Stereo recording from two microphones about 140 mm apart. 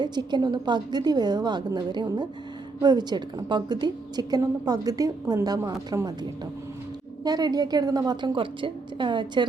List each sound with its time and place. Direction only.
0.0 s a woman's voice: 30° right (ahead or behind)
7.3 s a woman's voice: 30° right (ahead or behind)